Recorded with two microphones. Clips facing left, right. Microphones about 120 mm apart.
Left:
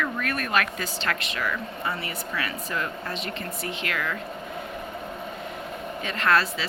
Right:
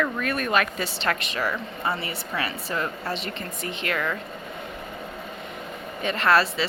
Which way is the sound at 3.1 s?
Centre (ahead or behind).